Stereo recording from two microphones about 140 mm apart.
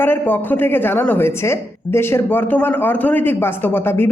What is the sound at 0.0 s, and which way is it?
A woman's voice, 15° left (ahead or behind).